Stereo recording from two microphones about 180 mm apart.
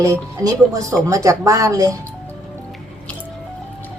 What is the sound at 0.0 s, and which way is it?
Speech, 20° right (ahead or behind).